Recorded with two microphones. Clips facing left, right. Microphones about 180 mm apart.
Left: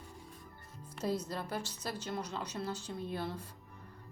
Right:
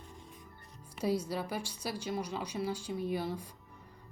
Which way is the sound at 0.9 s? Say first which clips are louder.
Right 3 dB; 10° right (ahead or behind).